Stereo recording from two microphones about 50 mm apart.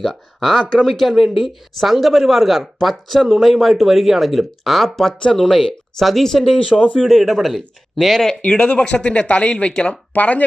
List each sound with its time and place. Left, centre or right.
0.0 s speech: centre
6.7 s speech: left
7.0 s speech: centre
8.4 s speech: left
10.2 s speech: left